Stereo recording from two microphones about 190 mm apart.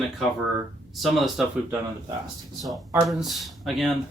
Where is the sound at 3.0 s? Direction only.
Centre (ahead or behind).